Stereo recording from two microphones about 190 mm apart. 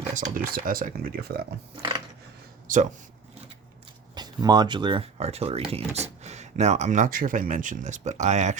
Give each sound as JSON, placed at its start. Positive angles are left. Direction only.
{"t": 0.1, "sound": "speech", "side_deg": -45}
{"t": 2.7, "sound": "speech", "side_deg": -45}
{"t": 4.1, "sound": "speech", "side_deg": -20}